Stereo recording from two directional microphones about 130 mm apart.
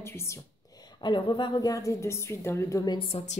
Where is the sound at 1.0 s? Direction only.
35° left (ahead or behind).